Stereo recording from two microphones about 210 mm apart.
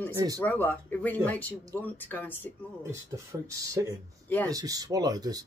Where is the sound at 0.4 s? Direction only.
10° left (ahead or behind).